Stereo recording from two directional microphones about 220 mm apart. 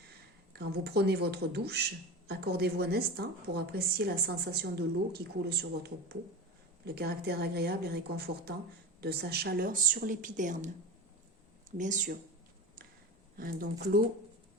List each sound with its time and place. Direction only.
0.5 s speech: 45° right (ahead or behind)
11.8 s speech: 35° right (ahead or behind)
13.3 s speech: 40° right (ahead or behind)